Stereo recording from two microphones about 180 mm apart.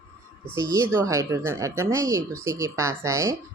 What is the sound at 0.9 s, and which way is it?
Speech, 15° right (ahead or behind).